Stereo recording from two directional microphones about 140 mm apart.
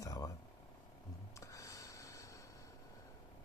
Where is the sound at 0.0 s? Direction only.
25° left (ahead or behind).